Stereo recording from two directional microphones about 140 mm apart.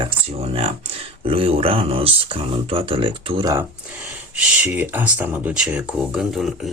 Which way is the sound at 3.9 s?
10° right (ahead or behind).